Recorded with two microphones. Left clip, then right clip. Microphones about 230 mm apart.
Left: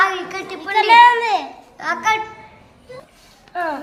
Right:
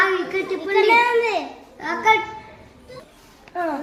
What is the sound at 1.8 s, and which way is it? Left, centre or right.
Speech, left.